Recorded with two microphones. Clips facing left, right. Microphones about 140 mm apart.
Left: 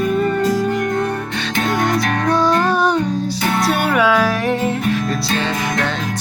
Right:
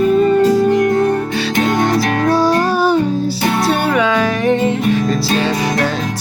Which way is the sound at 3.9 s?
5° left (ahead or behind).